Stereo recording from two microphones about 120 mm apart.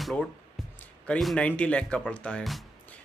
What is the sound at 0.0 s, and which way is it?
Speech, centre (ahead or behind).